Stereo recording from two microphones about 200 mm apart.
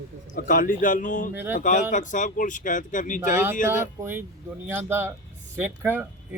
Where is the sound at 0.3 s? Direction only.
45° left (ahead or behind).